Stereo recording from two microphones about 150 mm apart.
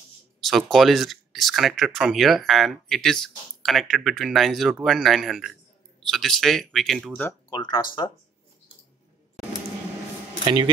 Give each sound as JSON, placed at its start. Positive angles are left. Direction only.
{"t": 0.5, "sound": "speech", "side_deg": 0}
{"t": 7.2, "sound": "speech", "side_deg": 30}
{"t": 10.4, "sound": "speech", "side_deg": -30}